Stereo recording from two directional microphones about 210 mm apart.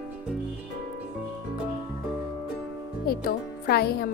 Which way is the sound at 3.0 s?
45° left (ahead or behind).